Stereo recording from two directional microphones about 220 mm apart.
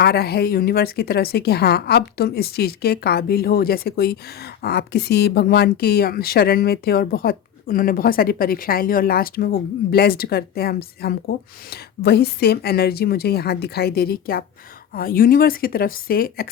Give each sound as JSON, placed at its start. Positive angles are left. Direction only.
{"t": 0.0, "sound": "speech", "side_deg": 45}